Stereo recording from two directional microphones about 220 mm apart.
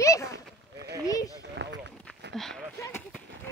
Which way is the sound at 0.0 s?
15° left (ahead or behind).